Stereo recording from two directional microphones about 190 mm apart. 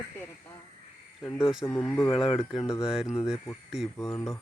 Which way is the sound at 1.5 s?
Centre (ahead or behind).